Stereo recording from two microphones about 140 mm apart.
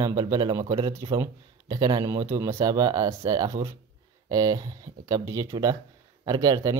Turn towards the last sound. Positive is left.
turn(degrees=-25)  # may be behind; listen again after turning